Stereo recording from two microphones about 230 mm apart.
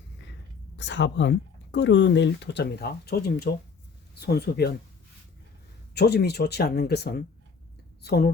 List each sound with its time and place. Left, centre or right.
0.8 s speech: left
5.9 s speech: left